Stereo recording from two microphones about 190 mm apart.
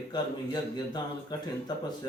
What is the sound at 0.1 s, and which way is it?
Speech, 20° left (ahead or behind).